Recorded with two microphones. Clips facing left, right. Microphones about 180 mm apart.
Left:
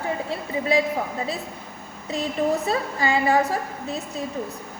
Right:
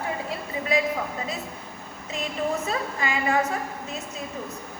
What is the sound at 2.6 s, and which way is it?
A woman's voice, 35° left (ahead or behind).